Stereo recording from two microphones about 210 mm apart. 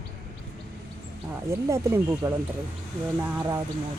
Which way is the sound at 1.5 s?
15° right (ahead or behind).